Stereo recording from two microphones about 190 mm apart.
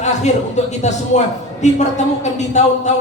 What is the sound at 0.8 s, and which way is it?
Speech, 40° left (ahead or behind).